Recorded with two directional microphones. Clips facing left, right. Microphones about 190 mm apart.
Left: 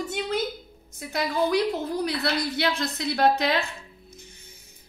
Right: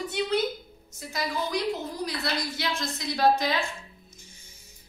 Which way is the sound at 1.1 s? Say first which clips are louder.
Left 6 dB; 60° left (ahead or behind).